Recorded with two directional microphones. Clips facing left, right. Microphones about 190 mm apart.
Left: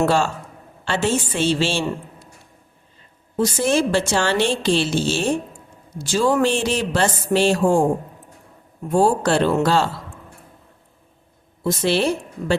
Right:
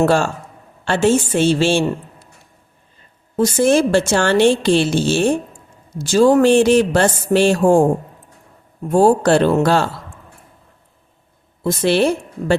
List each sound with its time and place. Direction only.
0.0 s a woman's voice: 50° right (ahead or behind)
3.3 s a woman's voice: 45° right (ahead or behind)
8.9 s a woman's voice: 45° right (ahead or behind)
11.6 s a woman's voice: 55° right (ahead or behind)